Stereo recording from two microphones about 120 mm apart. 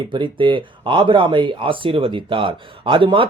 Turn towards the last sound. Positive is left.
turn(degrees=-45)  # may be behind; listen again after turning